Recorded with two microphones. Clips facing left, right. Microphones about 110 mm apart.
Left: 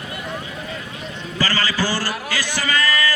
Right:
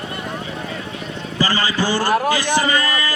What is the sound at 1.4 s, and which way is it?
A man's voice, 20° right (ahead or behind).